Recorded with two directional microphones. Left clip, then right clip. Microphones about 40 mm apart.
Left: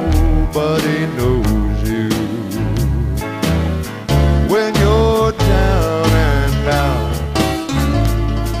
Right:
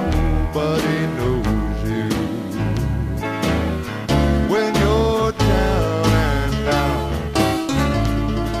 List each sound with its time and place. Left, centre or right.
0.6 s music: right
4.1 s music: centre
4.5 s music: right
6.6 s music: centre